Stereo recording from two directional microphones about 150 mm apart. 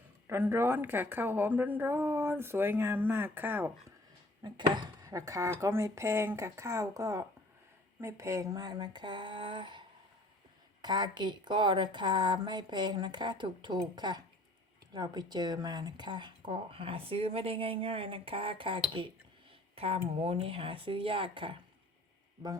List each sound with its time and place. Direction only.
0.3 s a woman's voice: 15° right (ahead or behind)
4.4 s a woman's voice: 30° right (ahead or behind)
10.8 s a woman's voice: 30° right (ahead or behind)